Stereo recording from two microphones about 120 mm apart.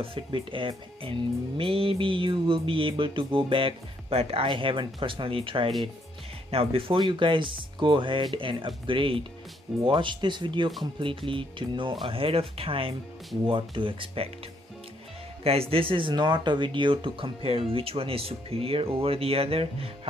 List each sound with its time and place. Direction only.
0.0 s speech: 45° right (ahead or behind)
15.4 s speech: 55° right (ahead or behind)